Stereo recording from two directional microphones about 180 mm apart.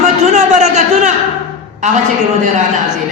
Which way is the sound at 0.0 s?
40° right (ahead or behind).